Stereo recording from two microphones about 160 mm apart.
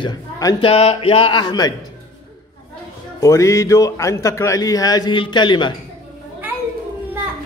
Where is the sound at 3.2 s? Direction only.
20° left (ahead or behind).